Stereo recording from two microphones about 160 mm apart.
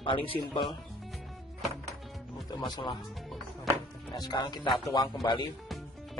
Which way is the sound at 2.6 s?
30° left (ahead or behind).